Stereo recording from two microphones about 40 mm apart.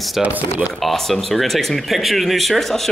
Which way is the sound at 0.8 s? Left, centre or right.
Centre.